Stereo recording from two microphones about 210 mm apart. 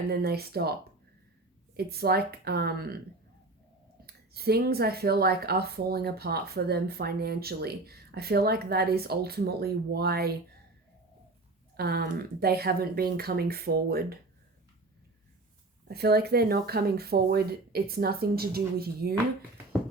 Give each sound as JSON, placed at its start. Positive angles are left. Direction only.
{"t": 0.1, "sound": "speech", "side_deg": -50}
{"t": 4.0, "sound": "speech", "side_deg": -50}
{"t": 11.8, "sound": "speech", "side_deg": -50}
{"t": 15.9, "sound": "speech", "side_deg": -50}